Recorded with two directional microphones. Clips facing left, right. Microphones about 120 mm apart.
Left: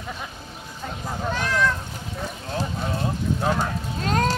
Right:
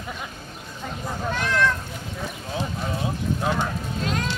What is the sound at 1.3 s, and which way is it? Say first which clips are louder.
Cat: even; centre (ahead or behind).